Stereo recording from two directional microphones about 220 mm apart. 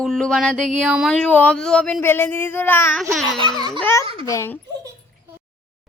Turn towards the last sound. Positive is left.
turn(degrees=10)  # may be behind; listen again after turning